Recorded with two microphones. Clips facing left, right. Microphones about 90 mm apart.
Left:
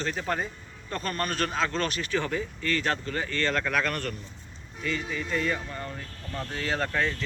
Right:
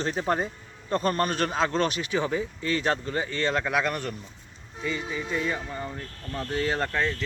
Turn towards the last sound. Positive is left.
turn(degrees=-5)  # may be behind; listen again after turning